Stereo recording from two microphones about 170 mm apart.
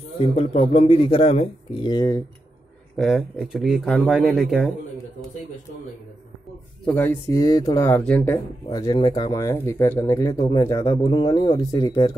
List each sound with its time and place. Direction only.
0.2 s a man's voice: 40° left (ahead or behind)
1.9 s speech: 20° left (ahead or behind)
3.0 s speech: centre (ahead or behind)
6.8 s speech: 5° left (ahead or behind)
7.2 s speech: 20° left (ahead or behind)
8.0 s speech: 10° left (ahead or behind)
8.6 s speech: 25° left (ahead or behind)